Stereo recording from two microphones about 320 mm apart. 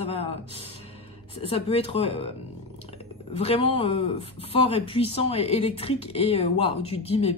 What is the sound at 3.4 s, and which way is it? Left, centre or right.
Speech, centre.